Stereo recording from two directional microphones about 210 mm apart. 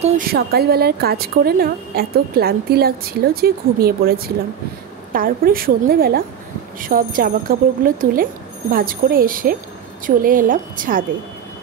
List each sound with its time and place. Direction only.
0.3 s a woman's voice: 50° right (ahead or behind)